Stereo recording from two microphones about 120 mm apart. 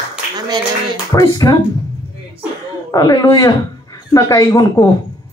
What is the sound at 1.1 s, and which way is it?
Speech, 30° left (ahead or behind).